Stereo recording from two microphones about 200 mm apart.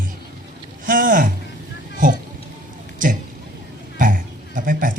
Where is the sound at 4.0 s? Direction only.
40° right (ahead or behind).